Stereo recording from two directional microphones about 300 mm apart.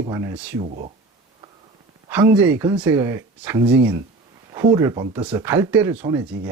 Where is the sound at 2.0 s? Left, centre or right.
Centre.